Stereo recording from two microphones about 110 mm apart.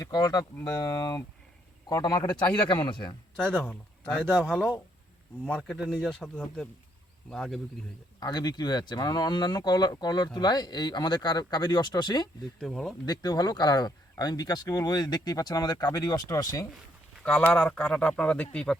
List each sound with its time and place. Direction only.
0.0 s a man's voice: 35° left (ahead or behind)
3.4 s speech: 10° left (ahead or behind)
5.5 s speech: 5° left (ahead or behind)
8.2 s speech: 40° left (ahead or behind)
12.5 s speech: centre (ahead or behind)
13.1 s speech: 35° left (ahead or behind)
17.2 s speech: 10° left (ahead or behind)